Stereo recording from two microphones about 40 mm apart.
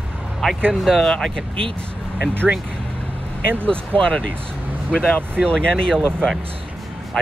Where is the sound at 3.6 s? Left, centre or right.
Left.